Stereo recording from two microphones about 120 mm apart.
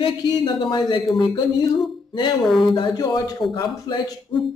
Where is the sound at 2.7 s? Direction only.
40° left (ahead or behind).